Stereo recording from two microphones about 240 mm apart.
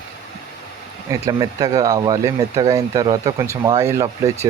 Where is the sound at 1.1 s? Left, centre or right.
Centre.